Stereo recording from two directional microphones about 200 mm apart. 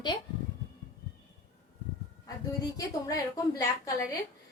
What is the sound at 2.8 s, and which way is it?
A woman's voice, 15° left (ahead or behind).